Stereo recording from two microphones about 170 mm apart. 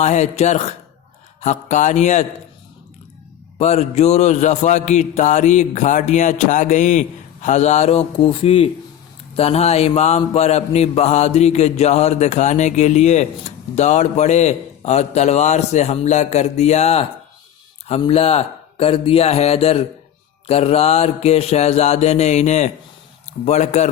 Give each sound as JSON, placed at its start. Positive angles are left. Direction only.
{"t": 0.0, "sound": "music", "side_deg": 45}
{"t": 3.6, "sound": "music", "side_deg": 40}
{"t": 7.4, "sound": "a man's voice", "side_deg": 45}